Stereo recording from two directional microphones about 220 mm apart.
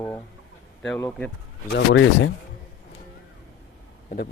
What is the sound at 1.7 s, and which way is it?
Speech, 55° left (ahead or behind).